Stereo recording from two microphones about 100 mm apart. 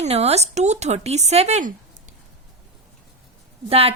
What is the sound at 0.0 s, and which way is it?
A woman's voice, 90° right.